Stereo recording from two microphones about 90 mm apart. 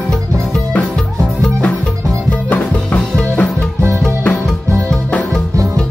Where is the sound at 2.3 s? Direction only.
15° left (ahead or behind).